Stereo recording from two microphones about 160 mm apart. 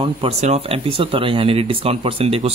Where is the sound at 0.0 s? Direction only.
40° right (ahead or behind).